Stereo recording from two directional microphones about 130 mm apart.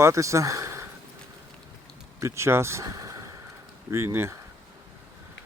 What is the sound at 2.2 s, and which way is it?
Speech, 20° right (ahead or behind).